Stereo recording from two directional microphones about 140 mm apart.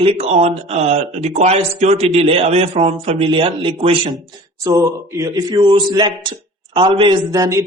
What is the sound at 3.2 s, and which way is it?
Speech, 35° right (ahead or behind).